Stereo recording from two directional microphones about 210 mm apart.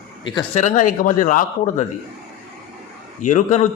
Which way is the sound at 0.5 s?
35° left (ahead or behind).